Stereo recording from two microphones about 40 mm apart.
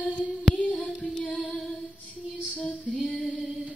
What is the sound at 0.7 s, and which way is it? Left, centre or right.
Child singing, centre.